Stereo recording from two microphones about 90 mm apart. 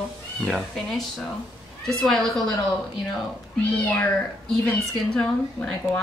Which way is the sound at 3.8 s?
20° left (ahead or behind).